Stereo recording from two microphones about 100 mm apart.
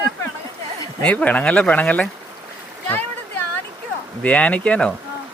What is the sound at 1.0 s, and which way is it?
Speech, 15° left (ahead or behind).